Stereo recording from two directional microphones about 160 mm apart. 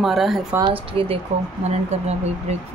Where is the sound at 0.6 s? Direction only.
35° right (ahead or behind).